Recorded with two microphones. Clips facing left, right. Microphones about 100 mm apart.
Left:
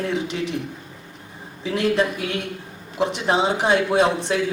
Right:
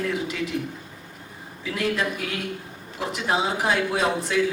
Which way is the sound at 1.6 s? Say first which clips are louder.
Left 5 dB; 30° left (ahead or behind).